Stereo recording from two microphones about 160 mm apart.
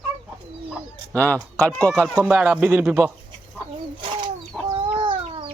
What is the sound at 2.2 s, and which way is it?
Speech, 10° right (ahead or behind).